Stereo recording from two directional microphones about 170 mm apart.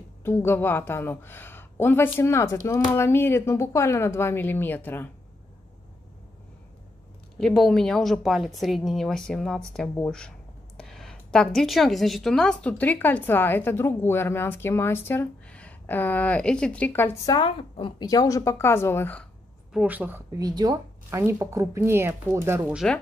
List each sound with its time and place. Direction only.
0.2 s a woman's voice: 15° left (ahead or behind)
7.3 s a woman's voice: centre (ahead or behind)
17.4 s a woman's voice: 30° left (ahead or behind); by 19.2 s 10° left (ahead or behind)
19.7 s speech: 5° right (ahead or behind)
20.3 s speech: 20° right (ahead or behind)